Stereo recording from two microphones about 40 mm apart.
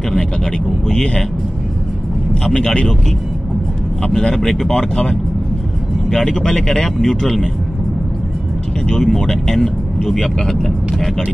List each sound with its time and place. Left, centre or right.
0.8 s vehicle: centre
2.5 s speech: left
4.2 s speech: centre
6.0 s speech: centre
8.8 s speech: centre